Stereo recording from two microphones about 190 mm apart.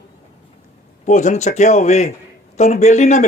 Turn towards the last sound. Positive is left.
turn(degrees=40)  # may be behind; listen again after turning